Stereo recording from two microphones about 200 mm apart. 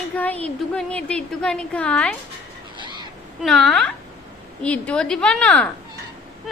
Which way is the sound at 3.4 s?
Centre (ahead or behind).